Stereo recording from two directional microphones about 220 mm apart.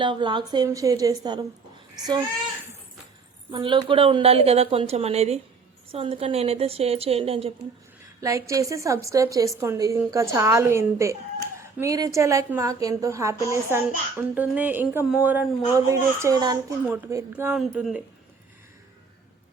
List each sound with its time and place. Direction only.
0.0 s a woman's voice: 20° right (ahead or behind)
3.5 s a woman's voice: 20° right (ahead or behind)
8.2 s a woman's voice: 15° right (ahead or behind)